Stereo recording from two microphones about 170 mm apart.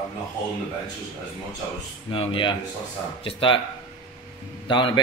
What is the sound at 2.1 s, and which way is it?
Speech, 30° left (ahead or behind).